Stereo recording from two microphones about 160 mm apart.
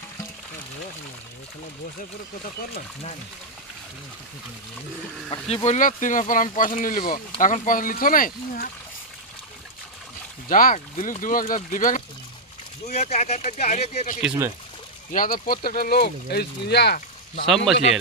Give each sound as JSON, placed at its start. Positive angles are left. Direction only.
{"t": 5.3, "sound": "speech", "side_deg": 40}
{"t": 10.5, "sound": "speech", "side_deg": 60}
{"t": 12.8, "sound": "speech", "side_deg": 45}
{"t": 15.1, "sound": "speech", "side_deg": 60}
{"t": 17.7, "sound": "speech", "side_deg": 0}